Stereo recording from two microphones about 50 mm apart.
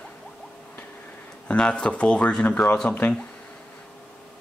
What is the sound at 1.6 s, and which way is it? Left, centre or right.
Speech, centre.